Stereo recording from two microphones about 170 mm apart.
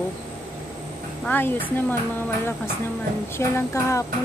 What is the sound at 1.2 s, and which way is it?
Speech, 10° left (ahead or behind).